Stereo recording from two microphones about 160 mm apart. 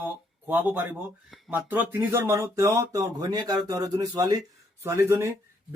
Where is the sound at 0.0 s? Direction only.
10° right (ahead or behind).